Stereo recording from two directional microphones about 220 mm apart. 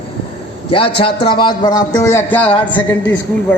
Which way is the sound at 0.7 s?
25° left (ahead or behind).